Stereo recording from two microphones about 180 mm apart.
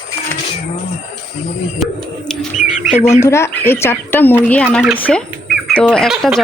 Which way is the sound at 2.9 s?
40° left (ahead or behind).